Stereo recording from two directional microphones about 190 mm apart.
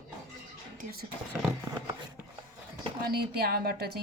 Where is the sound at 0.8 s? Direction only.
50° right (ahead or behind).